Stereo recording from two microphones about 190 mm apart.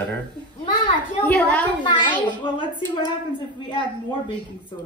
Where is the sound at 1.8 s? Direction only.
25° left (ahead or behind).